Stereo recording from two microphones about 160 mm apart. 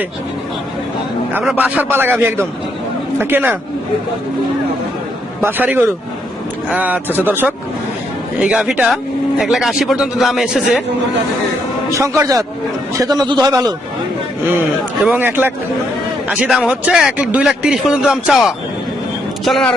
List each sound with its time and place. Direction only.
1.3 s a man's voice: 10° right (ahead or behind)
5.4 s a man's voice: 10° right (ahead or behind)
11.9 s a man's voice: 20° right (ahead or behind)
15.0 s a man's voice: 10° right (ahead or behind)